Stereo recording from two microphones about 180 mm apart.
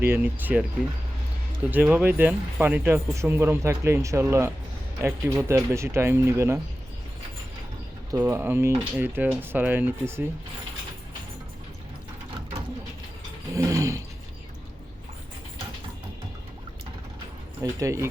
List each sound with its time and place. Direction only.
0.0 s speech: 10° right (ahead or behind)
1.7 s speech: 10° right (ahead or behind)
8.1 s speech: 10° right (ahead or behind)
13.5 s speech: 15° right (ahead or behind)
17.6 s speech: 20° right (ahead or behind)